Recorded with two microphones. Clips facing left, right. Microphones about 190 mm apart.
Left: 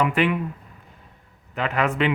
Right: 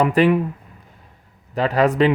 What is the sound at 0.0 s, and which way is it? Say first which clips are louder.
Speech: right 6 dB; 40° right (ahead or behind).